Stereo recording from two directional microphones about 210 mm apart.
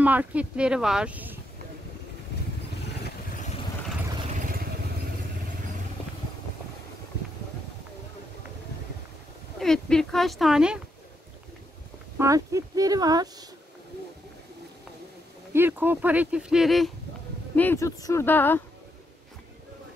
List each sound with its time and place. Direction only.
0.0 s speech: 5° right (ahead or behind)
9.6 s speech: centre (ahead or behind)
12.2 s speech: 15° right (ahead or behind)
15.5 s speech: 10° right (ahead or behind)
17.6 s speech: 10° left (ahead or behind)